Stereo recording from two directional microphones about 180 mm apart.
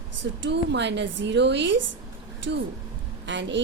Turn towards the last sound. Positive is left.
turn(degrees=-85)